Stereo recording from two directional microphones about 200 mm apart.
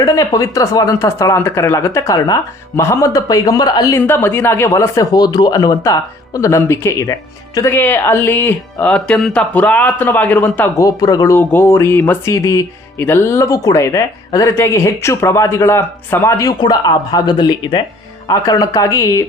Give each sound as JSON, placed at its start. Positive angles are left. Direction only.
{"t": 0.0, "sound": "speech", "side_deg": 15}